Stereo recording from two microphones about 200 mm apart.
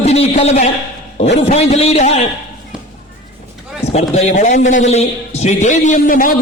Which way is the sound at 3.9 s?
35° left (ahead or behind).